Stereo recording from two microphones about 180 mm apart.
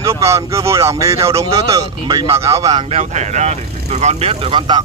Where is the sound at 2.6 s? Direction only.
35° right (ahead or behind).